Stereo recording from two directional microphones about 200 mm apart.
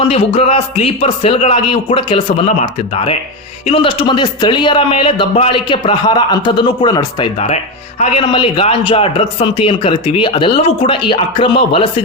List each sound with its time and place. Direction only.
0.1 s speech: 30° left (ahead or behind)